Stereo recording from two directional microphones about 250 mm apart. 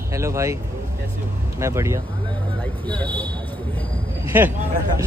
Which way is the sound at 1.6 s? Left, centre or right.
Centre.